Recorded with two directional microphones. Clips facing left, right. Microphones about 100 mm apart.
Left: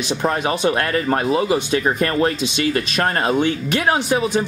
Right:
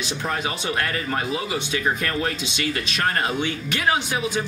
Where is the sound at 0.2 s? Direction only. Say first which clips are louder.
Left 9 dB; 45° left (ahead or behind).